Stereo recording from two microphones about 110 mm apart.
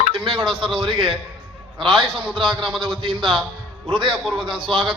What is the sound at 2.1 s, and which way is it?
Speech, centre (ahead or behind).